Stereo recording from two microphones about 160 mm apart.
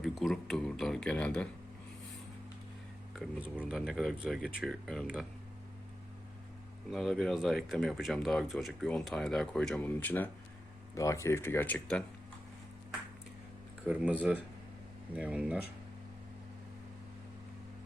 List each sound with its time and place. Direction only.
0.0 s speech: centre (ahead or behind)
3.1 s speech: 5° right (ahead or behind)
6.9 s speech: centre (ahead or behind)
13.8 s speech: 10° right (ahead or behind)